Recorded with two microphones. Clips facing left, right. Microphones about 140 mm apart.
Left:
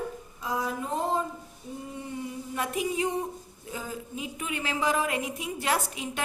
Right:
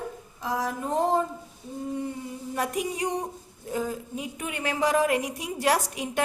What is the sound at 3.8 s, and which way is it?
A woman's voice, 55° right (ahead or behind).